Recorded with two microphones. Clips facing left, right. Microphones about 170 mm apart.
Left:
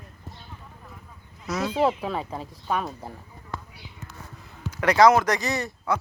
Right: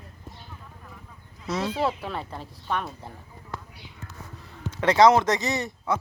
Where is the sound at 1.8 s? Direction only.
10° left (ahead or behind).